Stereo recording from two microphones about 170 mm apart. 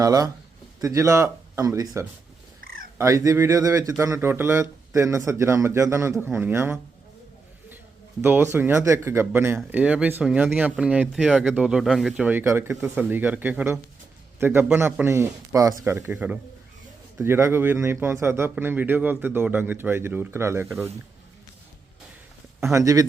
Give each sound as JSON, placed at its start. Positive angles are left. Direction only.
{"t": 0.0, "sound": "speech", "side_deg": -20}
{"t": 2.6, "sound": "cat", "side_deg": -55}
{"t": 3.0, "sound": "speech", "side_deg": -15}
{"t": 8.2, "sound": "speech", "side_deg": -10}
{"t": 22.6, "sound": "speech", "side_deg": -20}